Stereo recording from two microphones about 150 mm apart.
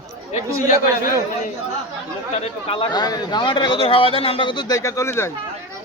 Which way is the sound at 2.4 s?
35° left (ahead or behind).